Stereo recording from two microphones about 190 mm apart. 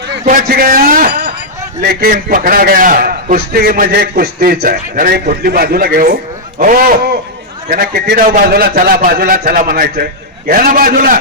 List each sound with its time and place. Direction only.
0.3 s a man's voice: 50° right (ahead or behind)